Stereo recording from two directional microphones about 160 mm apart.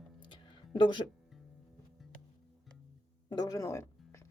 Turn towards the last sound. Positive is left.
turn(degrees=20)  # may be behind; listen again after turning